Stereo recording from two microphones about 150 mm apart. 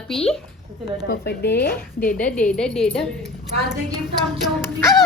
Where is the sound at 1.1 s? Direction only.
90° left.